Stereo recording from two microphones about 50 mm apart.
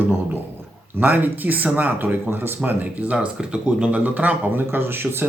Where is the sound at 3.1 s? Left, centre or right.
Centre.